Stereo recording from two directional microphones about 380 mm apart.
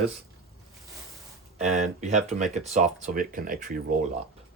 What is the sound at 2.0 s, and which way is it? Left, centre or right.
Speech, centre.